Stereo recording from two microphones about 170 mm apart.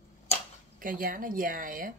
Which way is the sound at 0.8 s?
55° right (ahead or behind).